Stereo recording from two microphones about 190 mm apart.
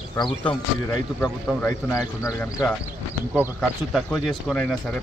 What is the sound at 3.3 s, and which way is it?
Speech, centre (ahead or behind).